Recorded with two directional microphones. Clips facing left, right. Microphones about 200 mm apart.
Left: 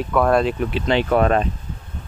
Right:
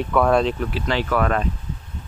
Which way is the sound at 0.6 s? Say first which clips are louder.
Left 4 dB; 20° left (ahead or behind).